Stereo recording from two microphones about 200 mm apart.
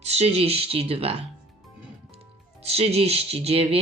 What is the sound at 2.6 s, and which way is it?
Music, 30° right (ahead or behind).